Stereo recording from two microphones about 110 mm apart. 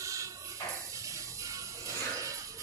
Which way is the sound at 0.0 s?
30° right (ahead or behind).